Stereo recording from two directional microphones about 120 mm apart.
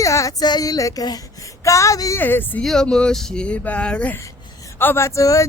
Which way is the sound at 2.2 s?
15° left (ahead or behind).